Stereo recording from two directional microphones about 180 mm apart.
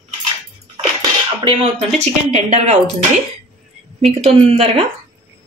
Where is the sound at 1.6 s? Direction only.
35° right (ahead or behind).